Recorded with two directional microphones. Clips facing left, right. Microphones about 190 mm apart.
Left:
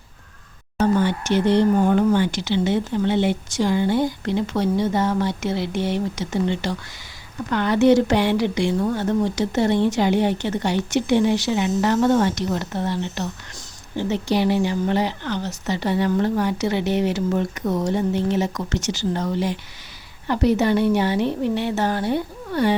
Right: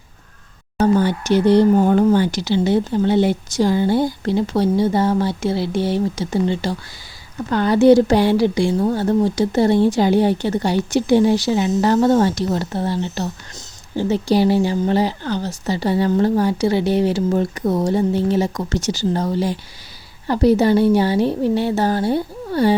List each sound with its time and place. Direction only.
0.8 s speech: 35° right (ahead or behind)